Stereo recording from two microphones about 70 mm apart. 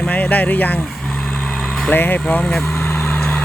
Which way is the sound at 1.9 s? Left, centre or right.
Left.